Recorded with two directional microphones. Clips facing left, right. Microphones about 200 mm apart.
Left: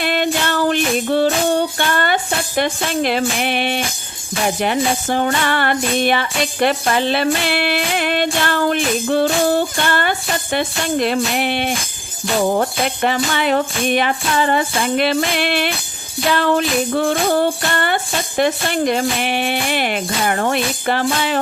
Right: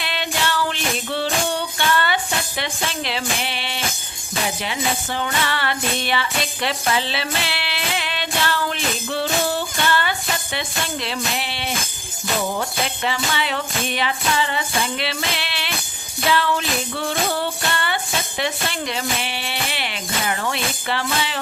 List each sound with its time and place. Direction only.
0.0 s music: 50° left (ahead or behind)